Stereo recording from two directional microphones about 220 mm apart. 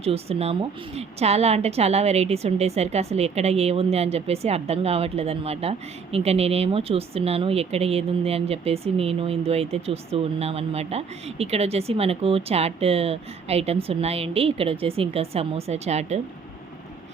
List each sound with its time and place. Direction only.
0.0 s a woman's voice: 25° right (ahead or behind)